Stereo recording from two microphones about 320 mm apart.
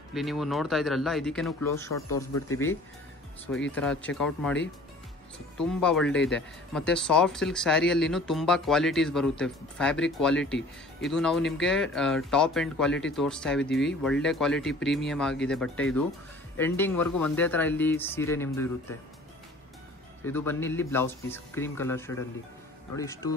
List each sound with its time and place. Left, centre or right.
0.1 s speech: centre
1.9 s speech: left
3.7 s speech: centre
5.6 s speech: centre
20.2 s speech: centre